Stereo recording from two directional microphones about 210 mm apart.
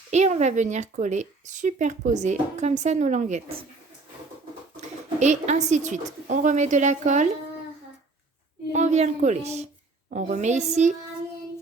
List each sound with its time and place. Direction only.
0.1 s a woman's voice: 35° right (ahead or behind)
5.0 s a woman's voice: 35° right (ahead or behind)
8.7 s a woman's voice: 35° right (ahead or behind)